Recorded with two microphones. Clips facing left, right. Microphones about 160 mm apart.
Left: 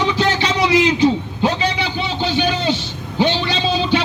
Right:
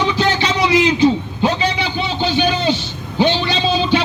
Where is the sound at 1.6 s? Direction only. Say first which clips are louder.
Right 1 dB; 20° right (ahead or behind).